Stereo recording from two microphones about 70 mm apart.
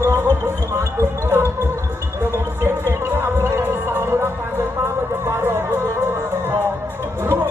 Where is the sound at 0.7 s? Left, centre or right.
Right.